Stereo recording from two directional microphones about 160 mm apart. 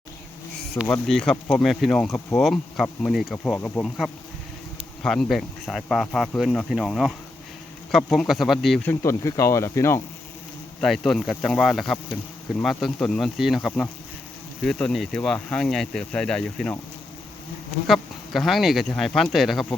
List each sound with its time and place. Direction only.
1.0 s speech: 5° left (ahead or behind)
8.9 s speech: 15° left (ahead or behind)
10.8 s speech: centre (ahead or behind)
17.8 s speech: centre (ahead or behind)